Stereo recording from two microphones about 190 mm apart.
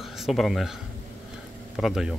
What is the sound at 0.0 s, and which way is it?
Speech, centre (ahead or behind).